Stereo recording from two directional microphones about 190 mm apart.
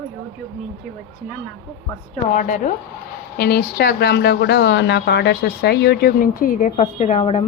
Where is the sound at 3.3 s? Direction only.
55° left (ahead or behind).